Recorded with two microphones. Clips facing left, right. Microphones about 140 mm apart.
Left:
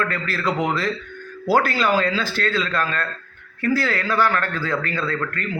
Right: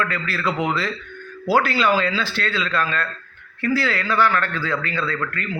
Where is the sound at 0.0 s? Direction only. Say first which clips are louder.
Even; 40° left (ahead or behind).